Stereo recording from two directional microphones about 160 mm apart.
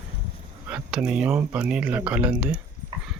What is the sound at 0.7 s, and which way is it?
Speech, 5° right (ahead or behind).